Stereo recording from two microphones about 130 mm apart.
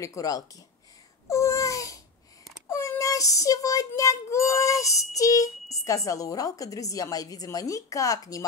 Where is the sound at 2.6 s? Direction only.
25° left (ahead or behind).